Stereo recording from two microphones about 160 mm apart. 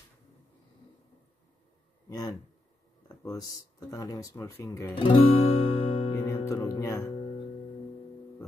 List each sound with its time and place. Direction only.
2.0 s speech: 25° left (ahead or behind)
3.9 s speech: 20° left (ahead or behind)
4.9 s guitar: 35° left (ahead or behind)
6.1 s music: 15° left (ahead or behind)